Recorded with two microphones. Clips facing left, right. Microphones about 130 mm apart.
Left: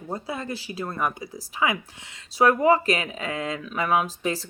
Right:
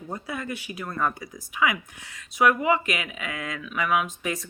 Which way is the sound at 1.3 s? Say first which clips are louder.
Even; 30° left (ahead or behind).